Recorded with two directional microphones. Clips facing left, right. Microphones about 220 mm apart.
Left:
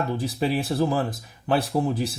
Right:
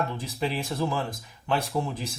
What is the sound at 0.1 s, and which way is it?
Speech, 35° left (ahead or behind).